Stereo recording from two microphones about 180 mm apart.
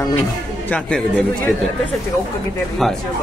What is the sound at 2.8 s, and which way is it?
Speech, centre (ahead or behind).